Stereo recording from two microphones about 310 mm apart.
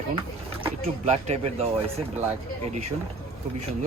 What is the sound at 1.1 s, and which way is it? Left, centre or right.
Speech, right.